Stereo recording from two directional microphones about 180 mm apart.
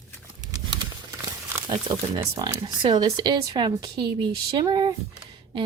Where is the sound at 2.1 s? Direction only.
25° right (ahead or behind).